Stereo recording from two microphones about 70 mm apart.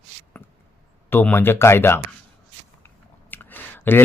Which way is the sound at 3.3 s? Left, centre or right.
Left.